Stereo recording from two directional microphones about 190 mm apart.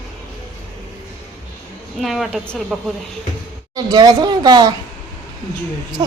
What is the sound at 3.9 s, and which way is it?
Speech, 20° right (ahead or behind).